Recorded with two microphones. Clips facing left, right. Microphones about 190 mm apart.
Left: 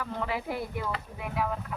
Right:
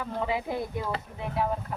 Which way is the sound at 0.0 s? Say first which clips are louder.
Right 3 dB; 20° right (ahead or behind).